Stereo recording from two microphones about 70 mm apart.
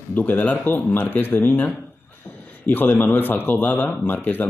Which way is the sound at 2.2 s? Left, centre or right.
Left.